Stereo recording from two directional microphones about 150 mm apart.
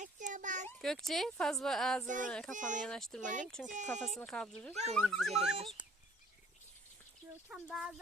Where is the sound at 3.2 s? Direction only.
55° right (ahead or behind).